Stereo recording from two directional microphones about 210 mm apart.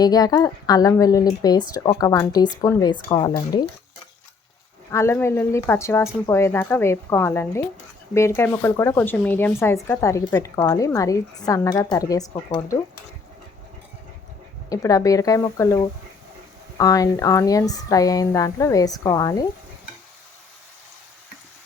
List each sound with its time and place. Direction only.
0.0 s speech: 15° left (ahead or behind)
4.9 s speech: 15° left (ahead or behind)
14.7 s speech: 15° left (ahead or behind)